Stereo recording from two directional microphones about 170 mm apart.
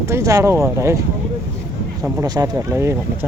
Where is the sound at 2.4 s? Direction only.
15° right (ahead or behind).